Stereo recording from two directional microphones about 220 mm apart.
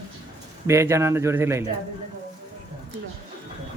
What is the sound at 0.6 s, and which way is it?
Speech, 10° right (ahead or behind).